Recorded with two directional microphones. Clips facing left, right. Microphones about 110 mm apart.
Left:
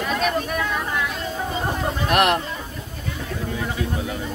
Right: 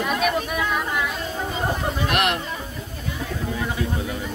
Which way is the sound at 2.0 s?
45° left (ahead or behind).